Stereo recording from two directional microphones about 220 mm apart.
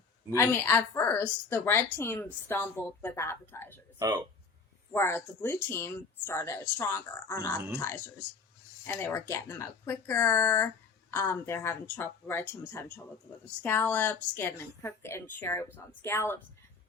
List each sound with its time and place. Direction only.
0.3 s a woman's voice: 10° left (ahead or behind)
3.9 s speech: 20° right (ahead or behind)
4.9 s a woman's voice: 10° left (ahead or behind)